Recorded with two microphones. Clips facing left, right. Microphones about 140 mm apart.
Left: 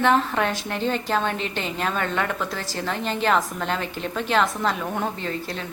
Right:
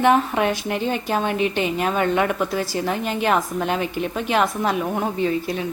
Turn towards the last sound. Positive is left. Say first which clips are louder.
# right 7 dB
turn(degrees=-10)  # may be behind; listen again after turning